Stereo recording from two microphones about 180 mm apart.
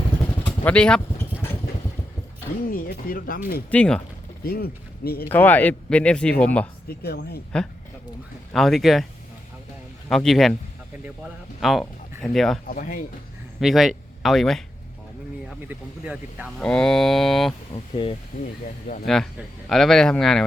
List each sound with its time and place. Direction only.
0.4 s speech: 10° left (ahead or behind)
2.6 s speech: 50° left (ahead or behind)
3.7 s speech: 5° left (ahead or behind)
4.4 s speech: 60° left (ahead or behind)
5.3 s speech: 10° left (ahead or behind)
6.8 s speech: 60° left (ahead or behind)
7.5 s speech: 5° left (ahead or behind)
10.1 s speech: centre (ahead or behind)
12.6 s speech: 50° left (ahead or behind)
13.6 s speech: centre (ahead or behind)
16.6 s speech: 5° left (ahead or behind)
17.7 s speech: 30° left (ahead or behind)
19.0 s speech: 5° left (ahead or behind)